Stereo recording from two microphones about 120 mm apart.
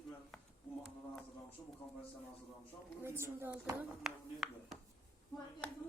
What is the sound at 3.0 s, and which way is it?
Speech, 20° right (ahead or behind).